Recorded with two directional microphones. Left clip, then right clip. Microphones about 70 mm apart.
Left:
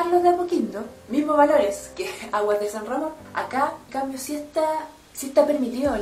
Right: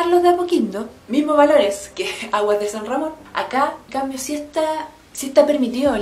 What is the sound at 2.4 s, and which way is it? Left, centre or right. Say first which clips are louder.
A woman's voice: right 3 dB; centre.